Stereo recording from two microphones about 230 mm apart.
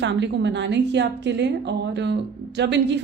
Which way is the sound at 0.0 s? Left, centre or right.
Right.